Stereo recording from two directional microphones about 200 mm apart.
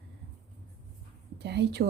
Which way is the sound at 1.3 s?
55° right (ahead or behind).